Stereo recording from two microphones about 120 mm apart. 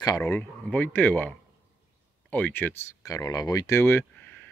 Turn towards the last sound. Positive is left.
turn(degrees=15)  # may be behind; listen again after turning